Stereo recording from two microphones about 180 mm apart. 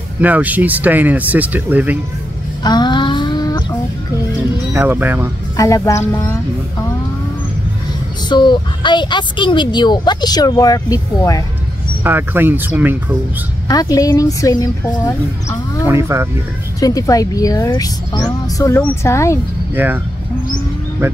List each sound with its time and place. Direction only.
0.2 s speech: 10° right (ahead or behind)
2.6 s a sound: 25° left (ahead or behind)
4.7 s speech: 10° right (ahead or behind)
5.6 s speech: 15° left (ahead or behind)
8.3 s a woman's voice: 25° left (ahead or behind)
12.0 s speech: 10° right (ahead or behind)
13.7 s a woman's voice: 20° left (ahead or behind)
15.9 s speech: 15° right (ahead or behind)
16.8 s a woman's voice: 20° left (ahead or behind)
19.7 s speech: 10° right (ahead or behind)
21.0 s speech: 15° right (ahead or behind)